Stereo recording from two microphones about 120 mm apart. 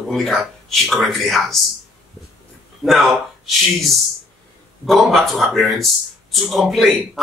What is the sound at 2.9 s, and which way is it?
Speech, centre (ahead or behind).